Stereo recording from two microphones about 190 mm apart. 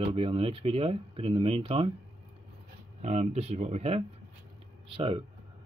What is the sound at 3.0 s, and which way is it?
Speech, 35° right (ahead or behind).